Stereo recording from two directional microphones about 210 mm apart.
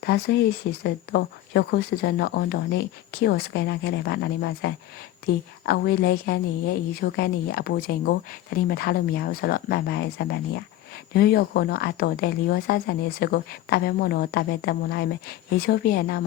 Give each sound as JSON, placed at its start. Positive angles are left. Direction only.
{"t": 0.0, "sound": "speech", "side_deg": 50}